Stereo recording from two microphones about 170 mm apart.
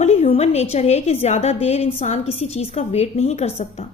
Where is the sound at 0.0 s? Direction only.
40° left (ahead or behind).